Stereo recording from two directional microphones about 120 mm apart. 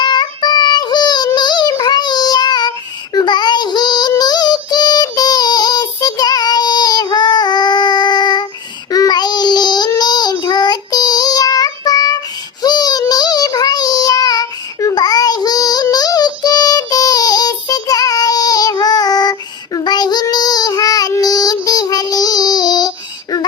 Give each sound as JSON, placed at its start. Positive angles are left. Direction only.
{"t": 0.0, "sound": "child singing", "side_deg": 35}